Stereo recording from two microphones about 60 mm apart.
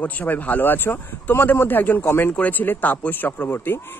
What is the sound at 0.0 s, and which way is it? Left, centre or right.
Speech, left.